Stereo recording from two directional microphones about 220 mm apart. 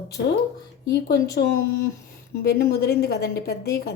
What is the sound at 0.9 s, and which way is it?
Speech, 45° left (ahead or behind).